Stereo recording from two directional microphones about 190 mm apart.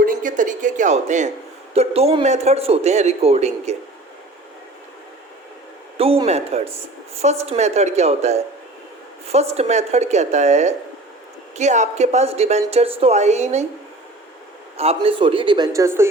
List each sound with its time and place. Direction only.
0.0 s a sound: 45° right (ahead or behind)
1.7 s speech: 30° right (ahead or behind)
6.0 s speech: 30° right (ahead or behind)
14.8 s a man's voice: 30° right (ahead or behind); by 16.0 s 15° right (ahead or behind)